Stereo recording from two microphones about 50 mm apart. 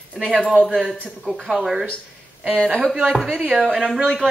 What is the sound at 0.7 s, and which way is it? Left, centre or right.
A man's voice, centre.